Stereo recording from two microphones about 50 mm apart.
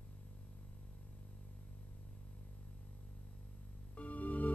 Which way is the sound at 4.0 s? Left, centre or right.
Left.